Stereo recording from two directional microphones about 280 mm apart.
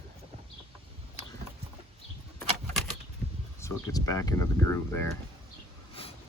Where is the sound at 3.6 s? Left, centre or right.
Centre.